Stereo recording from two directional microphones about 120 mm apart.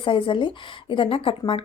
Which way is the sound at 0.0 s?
45° left (ahead or behind).